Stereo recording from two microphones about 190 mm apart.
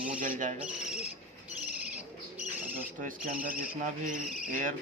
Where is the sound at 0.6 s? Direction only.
5° right (ahead or behind).